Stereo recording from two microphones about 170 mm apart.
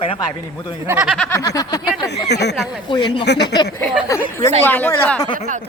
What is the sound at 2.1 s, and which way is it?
Speech, 85° left.